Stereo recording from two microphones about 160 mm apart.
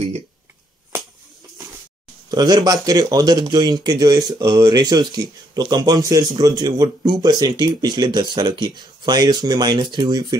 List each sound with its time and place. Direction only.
2.3 s speech: 25° right (ahead or behind)